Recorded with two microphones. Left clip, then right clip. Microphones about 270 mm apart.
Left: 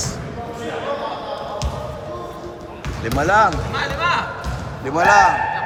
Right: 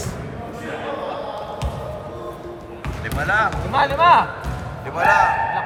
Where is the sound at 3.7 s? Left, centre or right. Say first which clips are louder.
Right 11 dB; centre.